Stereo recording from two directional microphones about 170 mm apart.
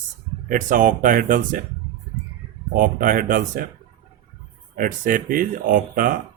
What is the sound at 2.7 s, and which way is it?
Speech, 55° right (ahead or behind).